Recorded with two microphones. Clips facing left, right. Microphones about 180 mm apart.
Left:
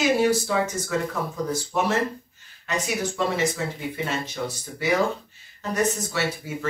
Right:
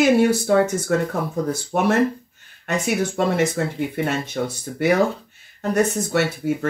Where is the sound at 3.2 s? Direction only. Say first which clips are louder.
Right 3 dB; 55° right (ahead or behind).